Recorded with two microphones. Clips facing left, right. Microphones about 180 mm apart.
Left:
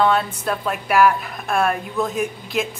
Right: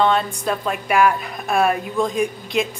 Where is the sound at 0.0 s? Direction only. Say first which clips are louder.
Even; 5° left (ahead or behind).